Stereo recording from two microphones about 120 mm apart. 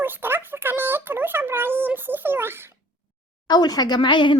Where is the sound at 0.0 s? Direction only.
15° right (ahead or behind).